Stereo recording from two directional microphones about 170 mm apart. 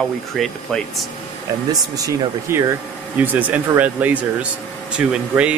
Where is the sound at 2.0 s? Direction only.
15° right (ahead or behind).